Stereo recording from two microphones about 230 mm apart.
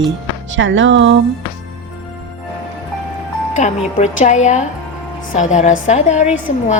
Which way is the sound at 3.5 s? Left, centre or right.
Left.